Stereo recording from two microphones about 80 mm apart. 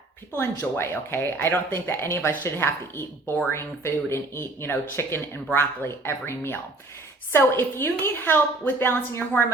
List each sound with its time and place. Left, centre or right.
0.3 s speech: left